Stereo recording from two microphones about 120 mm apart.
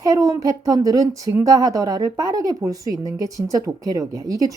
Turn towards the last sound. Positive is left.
turn(degrees=-30)  # may be behind; listen again after turning